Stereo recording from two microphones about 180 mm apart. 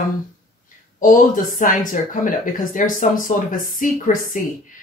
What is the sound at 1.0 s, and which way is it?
Speech, 50° left (ahead or behind).